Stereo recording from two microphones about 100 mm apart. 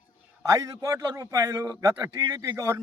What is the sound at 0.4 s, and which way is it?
A man's voice, 35° right (ahead or behind).